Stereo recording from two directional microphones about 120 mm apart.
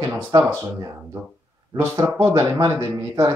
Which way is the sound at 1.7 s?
40° right (ahead or behind).